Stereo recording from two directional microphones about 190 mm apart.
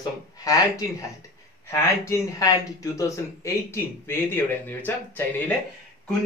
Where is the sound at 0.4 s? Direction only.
20° left (ahead or behind).